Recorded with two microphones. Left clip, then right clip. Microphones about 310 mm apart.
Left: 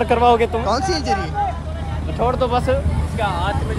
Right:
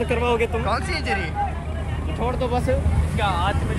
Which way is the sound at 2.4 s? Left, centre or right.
Centre.